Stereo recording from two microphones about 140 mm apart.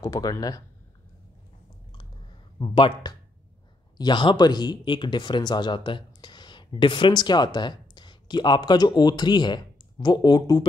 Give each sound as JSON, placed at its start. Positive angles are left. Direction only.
{"t": 0.0, "sound": "speech", "side_deg": 25}
{"t": 2.6, "sound": "speech", "side_deg": 35}